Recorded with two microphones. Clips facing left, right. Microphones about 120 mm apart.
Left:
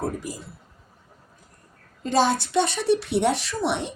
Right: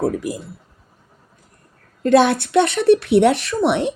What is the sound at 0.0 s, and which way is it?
Speech, 65° right (ahead or behind).